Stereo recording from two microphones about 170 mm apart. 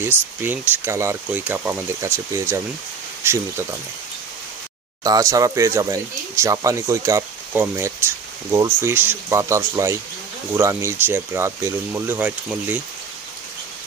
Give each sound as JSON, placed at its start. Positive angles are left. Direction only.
{"t": 0.4, "sound": "speech", "side_deg": -10}
{"t": 5.0, "sound": "speech", "side_deg": -20}